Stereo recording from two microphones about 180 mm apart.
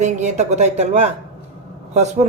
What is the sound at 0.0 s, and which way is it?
Speech, 40° right (ahead or behind).